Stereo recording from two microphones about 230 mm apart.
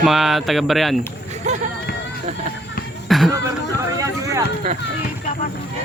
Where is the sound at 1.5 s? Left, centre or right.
Right.